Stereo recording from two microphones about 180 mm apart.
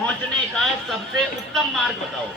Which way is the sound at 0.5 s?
5° left (ahead or behind).